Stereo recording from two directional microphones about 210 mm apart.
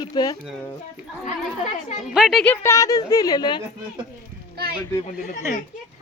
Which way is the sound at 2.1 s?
Centre (ahead or behind).